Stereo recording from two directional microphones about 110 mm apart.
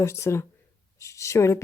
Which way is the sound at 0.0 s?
25° left (ahead or behind).